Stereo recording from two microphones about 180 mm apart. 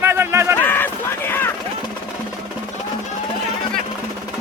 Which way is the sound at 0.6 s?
10° left (ahead or behind).